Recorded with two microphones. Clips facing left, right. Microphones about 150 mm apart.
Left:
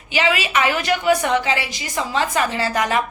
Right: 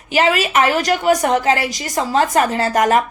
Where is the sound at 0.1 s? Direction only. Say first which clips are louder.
Right 4 dB; 45° right (ahead or behind).